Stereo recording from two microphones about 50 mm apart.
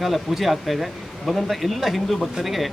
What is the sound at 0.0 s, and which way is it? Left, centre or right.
Speech, centre.